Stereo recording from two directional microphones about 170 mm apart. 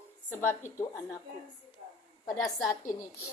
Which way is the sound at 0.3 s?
15° left (ahead or behind).